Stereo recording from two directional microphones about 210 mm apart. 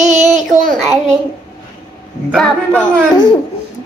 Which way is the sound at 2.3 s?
5° left (ahead or behind).